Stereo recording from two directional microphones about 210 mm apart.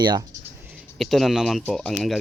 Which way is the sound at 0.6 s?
5° right (ahead or behind).